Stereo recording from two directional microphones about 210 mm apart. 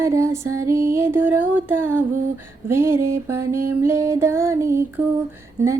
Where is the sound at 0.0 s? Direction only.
15° right (ahead or behind).